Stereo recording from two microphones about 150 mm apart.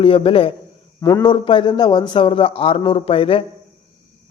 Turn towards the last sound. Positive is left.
turn(degrees=40)  # may be behind; listen again after turning